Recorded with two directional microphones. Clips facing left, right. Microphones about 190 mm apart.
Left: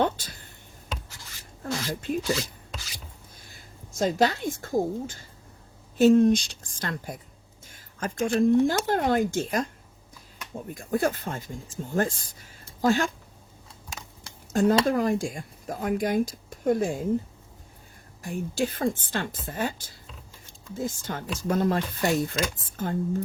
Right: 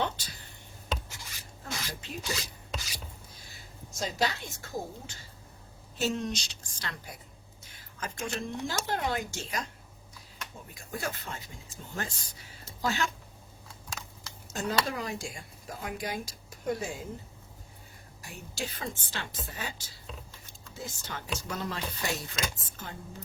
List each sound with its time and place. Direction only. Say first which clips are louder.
0.0 s a sound: left 7 dB; 50° left (ahead or behind)
1.9 s speech: left 11 dB; 50° left (ahead or behind)
3.3 s a woman's voice: left 1 dB; 50° left (ahead or behind)
14.5 s speech: left 10 dB; 50° left (ahead or behind)
18.2 s speech: left 11 dB; 50° left (ahead or behind)